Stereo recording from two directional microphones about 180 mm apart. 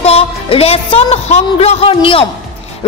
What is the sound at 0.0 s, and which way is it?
A woman's voice, 35° left (ahead or behind).